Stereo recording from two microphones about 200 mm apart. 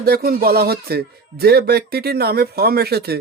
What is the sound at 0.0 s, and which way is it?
Speech, 50° right (ahead or behind).